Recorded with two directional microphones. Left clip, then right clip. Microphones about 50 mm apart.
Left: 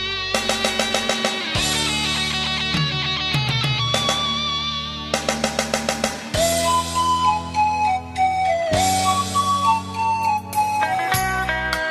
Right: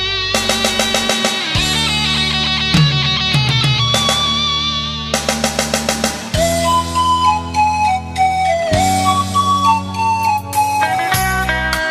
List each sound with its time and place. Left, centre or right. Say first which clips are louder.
0.3 s music: right 4 dB; left
0.9 s music: right 5 dB; left
3.9 s music: right 5 dB; left
6.4 s music: right 4 dB; centre